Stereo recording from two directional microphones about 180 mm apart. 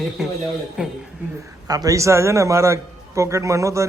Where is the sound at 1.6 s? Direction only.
20° right (ahead or behind).